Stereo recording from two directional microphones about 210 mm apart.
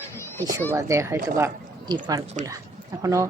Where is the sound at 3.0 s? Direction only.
15° right (ahead or behind).